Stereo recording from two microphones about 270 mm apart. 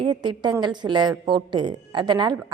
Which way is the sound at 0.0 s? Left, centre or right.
Centre.